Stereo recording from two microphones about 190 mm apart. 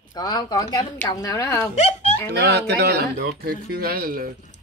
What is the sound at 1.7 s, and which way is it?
Speech, 35° left (ahead or behind).